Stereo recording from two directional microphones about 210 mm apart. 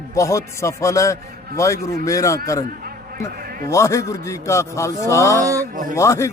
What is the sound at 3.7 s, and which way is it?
A man's voice, 15° left (ahead or behind).